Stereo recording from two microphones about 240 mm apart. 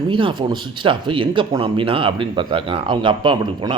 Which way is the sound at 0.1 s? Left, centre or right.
Right.